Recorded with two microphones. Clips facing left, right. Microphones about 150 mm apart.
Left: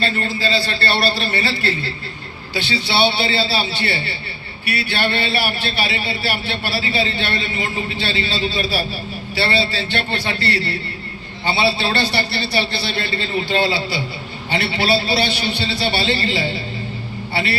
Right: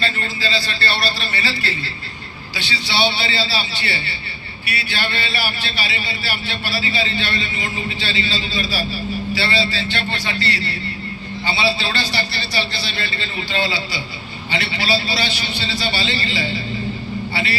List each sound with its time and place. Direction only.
0.0 s a man's voice: 55° left (ahead or behind)